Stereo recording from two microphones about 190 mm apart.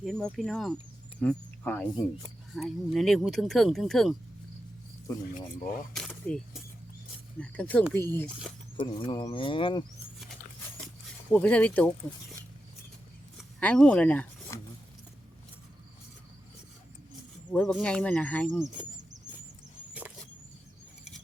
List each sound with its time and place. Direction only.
0.0 s speech: 5° left (ahead or behind)
5.9 s speech: 5° left (ahead or behind)
8.7 s speech: 25° left (ahead or behind)
11.3 s speech: 10° left (ahead or behind)
13.6 s speech: 5° left (ahead or behind)
17.5 s speech: centre (ahead or behind)
19.9 s a sound: 5° right (ahead or behind)